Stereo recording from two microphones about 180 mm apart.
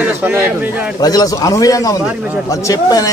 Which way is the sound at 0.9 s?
20° left (ahead or behind).